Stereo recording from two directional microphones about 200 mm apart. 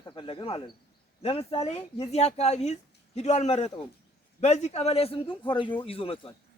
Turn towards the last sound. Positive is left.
turn(degrees=25)  # may be behind; listen again after turning